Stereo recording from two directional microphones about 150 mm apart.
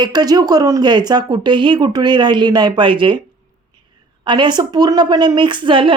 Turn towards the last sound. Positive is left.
turn(degrees=-35)  # may be behind; listen again after turning